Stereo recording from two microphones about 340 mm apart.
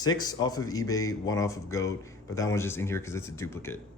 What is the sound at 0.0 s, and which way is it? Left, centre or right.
Speech, centre.